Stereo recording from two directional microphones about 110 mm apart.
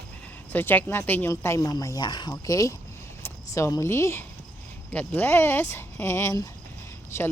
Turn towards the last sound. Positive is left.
turn(degrees=25)  # may be behind; listen again after turning